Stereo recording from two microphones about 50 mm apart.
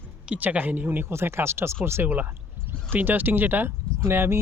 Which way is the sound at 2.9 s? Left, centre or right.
Right.